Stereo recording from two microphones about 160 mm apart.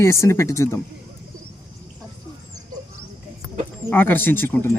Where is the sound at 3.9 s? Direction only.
10° left (ahead or behind).